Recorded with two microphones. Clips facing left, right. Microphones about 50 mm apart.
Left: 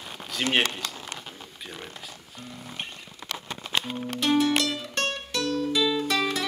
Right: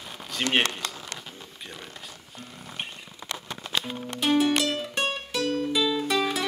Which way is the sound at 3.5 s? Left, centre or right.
Left.